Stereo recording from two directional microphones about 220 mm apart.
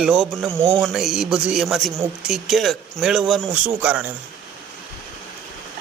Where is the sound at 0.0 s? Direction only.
5° right (ahead or behind).